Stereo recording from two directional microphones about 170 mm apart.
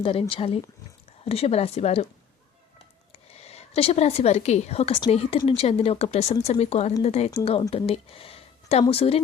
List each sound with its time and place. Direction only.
0.0 s a woman's voice: 30° left (ahead or behind)
3.1 s a woman's voice: 35° left (ahead or behind)